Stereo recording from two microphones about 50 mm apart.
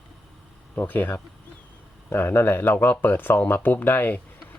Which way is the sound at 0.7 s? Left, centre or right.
Left.